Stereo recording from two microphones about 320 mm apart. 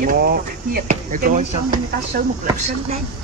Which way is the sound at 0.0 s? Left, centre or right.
Right.